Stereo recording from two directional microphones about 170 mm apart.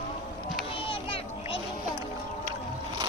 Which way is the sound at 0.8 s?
30° left (ahead or behind).